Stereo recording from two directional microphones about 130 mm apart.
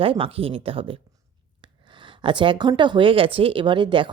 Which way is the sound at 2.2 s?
40° right (ahead or behind).